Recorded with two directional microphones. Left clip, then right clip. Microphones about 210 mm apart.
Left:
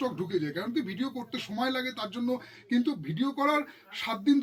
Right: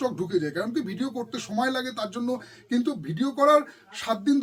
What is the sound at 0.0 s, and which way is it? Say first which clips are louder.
Speech: right 4 dB; 20° right (ahead or behind).